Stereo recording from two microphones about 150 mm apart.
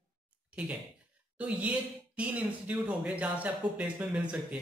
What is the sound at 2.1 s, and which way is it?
Speech, 10° right (ahead or behind).